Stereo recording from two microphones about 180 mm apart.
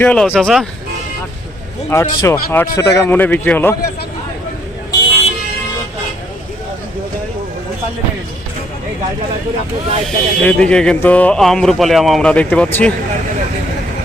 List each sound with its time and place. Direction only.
0.0 s speech: 10° left (ahead or behind)
1.9 s speech: 15° left (ahead or behind)
10.1 s speech: 5° left (ahead or behind)